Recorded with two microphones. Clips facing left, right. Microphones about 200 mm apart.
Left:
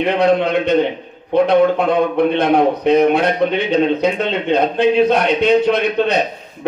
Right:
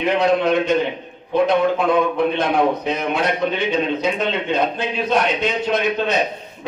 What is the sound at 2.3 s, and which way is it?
A man's voice, 60° left (ahead or behind).